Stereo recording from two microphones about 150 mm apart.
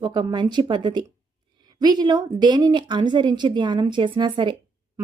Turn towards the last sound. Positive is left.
turn(degrees=-30)  # may be behind; listen again after turning